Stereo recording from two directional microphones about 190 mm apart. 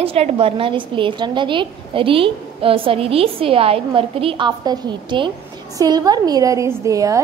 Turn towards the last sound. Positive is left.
turn(degrees=-15)  # may be behind; listen again after turning